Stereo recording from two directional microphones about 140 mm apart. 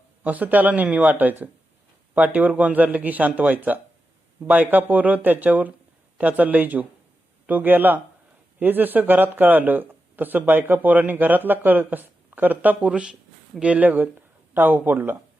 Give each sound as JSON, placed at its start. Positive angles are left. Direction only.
{"t": 0.2, "sound": "speech", "side_deg": -10}